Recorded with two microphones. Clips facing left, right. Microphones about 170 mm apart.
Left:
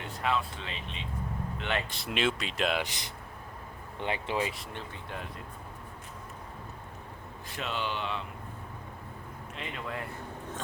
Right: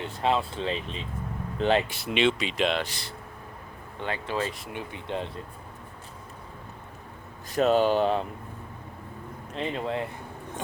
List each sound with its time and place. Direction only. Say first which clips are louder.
0.0 s speech: right 5 dB; 30° right (ahead or behind)
1.9 s speech: right 6 dB; centre (ahead or behind)
2.8 s speech: right 2 dB; 20° left (ahead or behind)
4.7 s speech: right 7 dB; 15° right (ahead or behind)
7.5 s speech: right 14 dB; 40° right (ahead or behind)
9.6 s speech: right 9 dB; 30° right (ahead or behind)